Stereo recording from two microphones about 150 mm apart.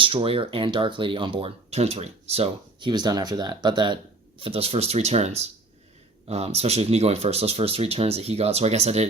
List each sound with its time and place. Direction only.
0.0 s speech: 35° right (ahead or behind)